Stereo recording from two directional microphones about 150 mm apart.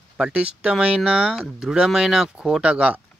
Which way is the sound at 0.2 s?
5° right (ahead or behind).